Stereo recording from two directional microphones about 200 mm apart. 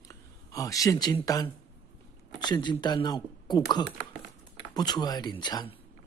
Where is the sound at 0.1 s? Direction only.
15° left (ahead or behind).